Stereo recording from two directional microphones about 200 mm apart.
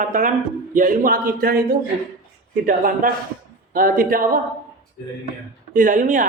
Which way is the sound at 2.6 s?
45° right (ahead or behind).